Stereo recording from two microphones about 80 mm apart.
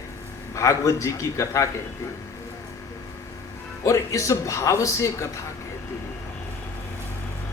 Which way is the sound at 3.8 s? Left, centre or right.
Left.